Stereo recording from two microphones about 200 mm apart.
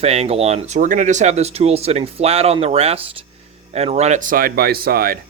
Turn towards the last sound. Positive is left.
turn(degrees=-50)  # may be behind; listen again after turning